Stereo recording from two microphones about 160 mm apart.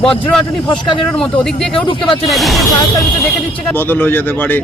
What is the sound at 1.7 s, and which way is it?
Speech, 30° left (ahead or behind).